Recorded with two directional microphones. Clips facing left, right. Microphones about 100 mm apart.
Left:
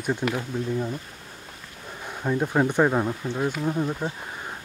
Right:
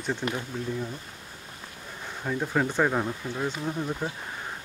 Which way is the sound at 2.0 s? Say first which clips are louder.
Left 5 dB; 15° left (ahead or behind).